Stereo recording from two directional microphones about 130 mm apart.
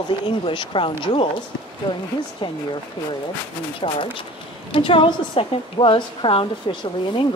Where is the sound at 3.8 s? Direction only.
45° left (ahead or behind).